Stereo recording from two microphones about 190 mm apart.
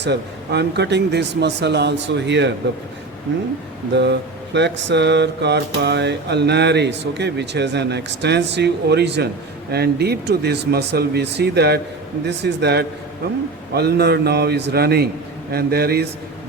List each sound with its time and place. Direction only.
0.0 s mantra: 60° right (ahead or behind)
3.9 s mantra: 65° right (ahead or behind)